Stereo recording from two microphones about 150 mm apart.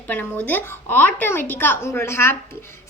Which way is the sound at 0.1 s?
10° left (ahead or behind).